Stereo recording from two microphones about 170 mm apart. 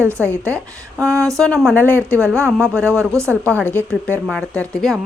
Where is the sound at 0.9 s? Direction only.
15° right (ahead or behind).